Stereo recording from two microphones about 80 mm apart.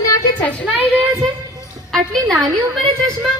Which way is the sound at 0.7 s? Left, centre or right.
Centre.